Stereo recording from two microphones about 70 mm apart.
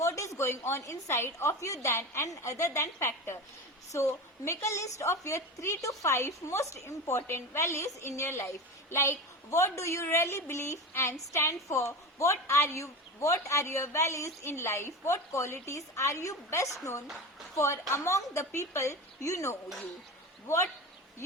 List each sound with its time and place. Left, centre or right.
0.0 s a woman's voice: left